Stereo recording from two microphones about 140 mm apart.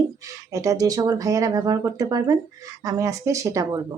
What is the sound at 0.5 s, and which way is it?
Speech, 25° right (ahead or behind).